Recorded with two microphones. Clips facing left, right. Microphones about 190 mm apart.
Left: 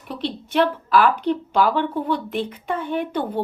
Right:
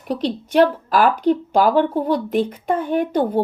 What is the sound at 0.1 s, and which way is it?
Speech, 40° right (ahead or behind).